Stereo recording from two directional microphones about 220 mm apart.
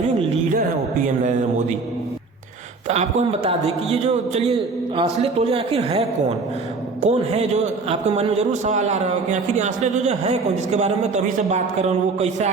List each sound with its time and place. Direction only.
1.0 s a man's voice: 35° right (ahead or behind)
2.8 s a man's voice: 30° right (ahead or behind)